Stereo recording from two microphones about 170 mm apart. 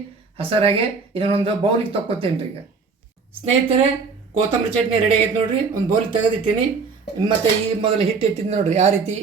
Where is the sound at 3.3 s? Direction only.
35° right (ahead or behind).